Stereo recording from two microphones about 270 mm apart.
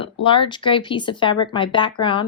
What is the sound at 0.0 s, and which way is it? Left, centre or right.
A woman's voice, centre.